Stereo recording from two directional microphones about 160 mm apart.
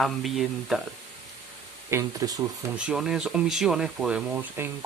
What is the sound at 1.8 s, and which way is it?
Speech, 20° right (ahead or behind).